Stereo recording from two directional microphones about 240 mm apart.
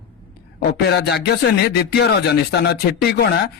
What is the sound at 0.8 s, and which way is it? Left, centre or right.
Speech, left.